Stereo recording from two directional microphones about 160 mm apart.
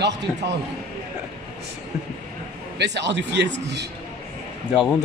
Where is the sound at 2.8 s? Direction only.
90° right.